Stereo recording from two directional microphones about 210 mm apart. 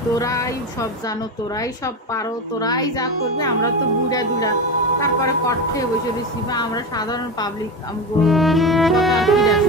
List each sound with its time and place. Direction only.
0.2 s speech: 15° left (ahead or behind)
2.1 s speech: 20° left (ahead or behind)
8.2 s music: centre (ahead or behind)